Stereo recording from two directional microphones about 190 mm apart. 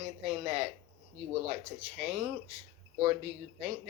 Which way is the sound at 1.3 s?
30° right (ahead or behind).